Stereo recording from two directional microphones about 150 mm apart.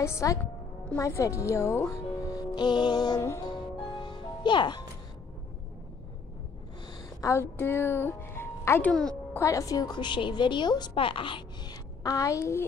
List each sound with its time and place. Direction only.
0.0 s a woman's voice: 20° left (ahead or behind)
2.5 s a woman's voice: 30° left (ahead or behind)
4.0 s music: 30° left (ahead or behind)
7.2 s speech: 20° left (ahead or behind)
8.9 s speech: 5° left (ahead or behind)
9.4 s a woman's voice: 20° left (ahead or behind)